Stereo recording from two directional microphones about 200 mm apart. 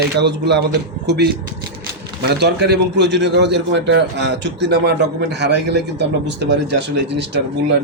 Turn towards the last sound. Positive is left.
turn(degrees=-60)  # may be behind; listen again after turning